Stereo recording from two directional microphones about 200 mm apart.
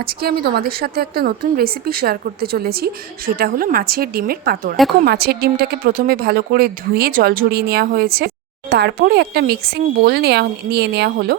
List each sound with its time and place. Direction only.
0.0 s a woman's voice: 50° right (ahead or behind)